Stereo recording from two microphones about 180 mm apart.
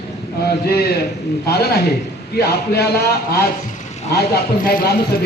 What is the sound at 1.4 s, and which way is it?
Speech, 60° left (ahead or behind).